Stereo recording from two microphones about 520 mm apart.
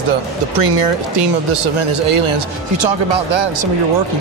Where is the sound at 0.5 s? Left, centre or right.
Right.